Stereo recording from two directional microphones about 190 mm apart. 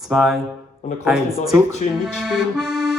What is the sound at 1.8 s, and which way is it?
Speech, 40° left (ahead or behind).